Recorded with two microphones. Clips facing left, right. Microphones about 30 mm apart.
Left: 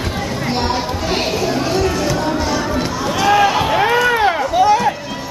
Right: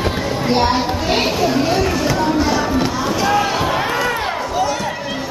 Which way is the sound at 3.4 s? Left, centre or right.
Centre.